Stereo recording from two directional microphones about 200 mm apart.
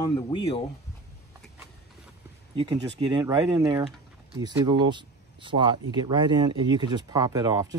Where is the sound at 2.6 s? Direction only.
25° right (ahead or behind).